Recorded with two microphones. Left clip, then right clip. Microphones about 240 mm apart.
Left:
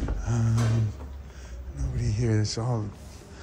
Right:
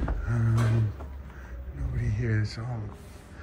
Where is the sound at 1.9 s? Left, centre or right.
Centre.